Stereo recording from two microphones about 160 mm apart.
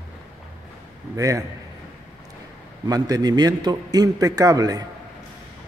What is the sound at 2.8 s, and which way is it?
A man's voice, 25° right (ahead or behind).